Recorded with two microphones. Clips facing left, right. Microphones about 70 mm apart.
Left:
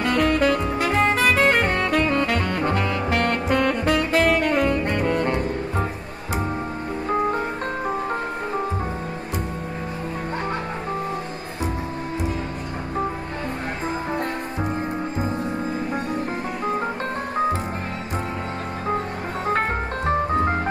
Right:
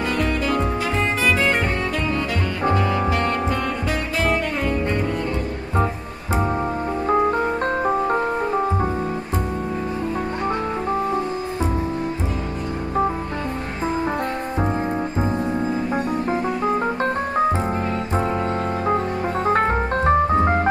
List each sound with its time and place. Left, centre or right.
0.0 s music: left
0.8 s saxophone: left
3.1 s music: left
18.9 s music: right
20.1 s organ: right